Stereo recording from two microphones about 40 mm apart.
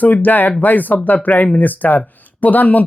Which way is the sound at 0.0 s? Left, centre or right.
Left.